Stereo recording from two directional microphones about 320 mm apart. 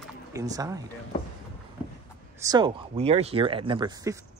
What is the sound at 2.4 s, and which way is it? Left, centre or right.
Speech, centre.